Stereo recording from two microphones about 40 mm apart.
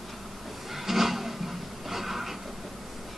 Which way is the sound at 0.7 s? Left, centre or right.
Centre.